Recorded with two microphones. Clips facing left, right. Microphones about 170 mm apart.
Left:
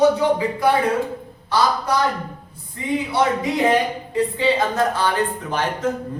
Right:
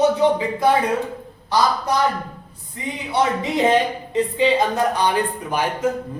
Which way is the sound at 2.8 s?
20° right (ahead or behind).